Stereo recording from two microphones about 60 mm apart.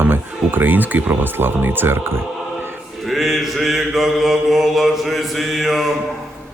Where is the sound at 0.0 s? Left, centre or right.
Right.